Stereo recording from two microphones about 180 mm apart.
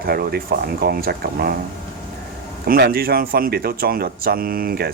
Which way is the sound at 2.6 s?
55° right (ahead or behind).